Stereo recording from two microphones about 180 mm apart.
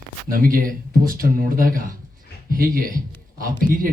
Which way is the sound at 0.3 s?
50° right (ahead or behind).